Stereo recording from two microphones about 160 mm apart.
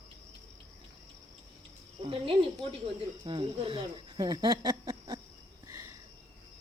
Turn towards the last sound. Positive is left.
turn(degrees=-30)  # may be behind; listen again after turning